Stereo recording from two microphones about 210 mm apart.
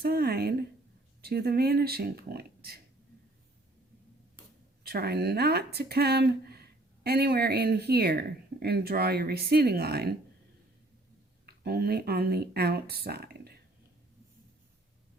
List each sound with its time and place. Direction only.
0.0 s speech: 45° right (ahead or behind)
4.8 s speech: 50° right (ahead or behind)
11.4 s speech: 50° right (ahead or behind)